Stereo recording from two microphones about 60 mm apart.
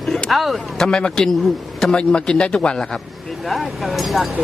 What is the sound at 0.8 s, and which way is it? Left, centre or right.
A man's voice, centre.